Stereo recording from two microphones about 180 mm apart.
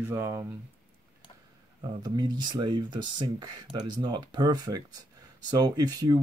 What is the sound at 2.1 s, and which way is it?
Speech, 25° right (ahead or behind).